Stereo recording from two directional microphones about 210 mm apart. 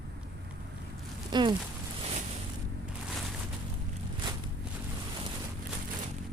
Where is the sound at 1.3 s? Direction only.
20° right (ahead or behind).